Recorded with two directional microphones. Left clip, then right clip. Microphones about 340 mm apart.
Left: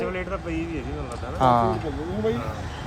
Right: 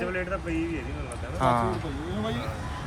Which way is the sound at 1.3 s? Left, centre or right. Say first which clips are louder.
Left 5 dB; centre.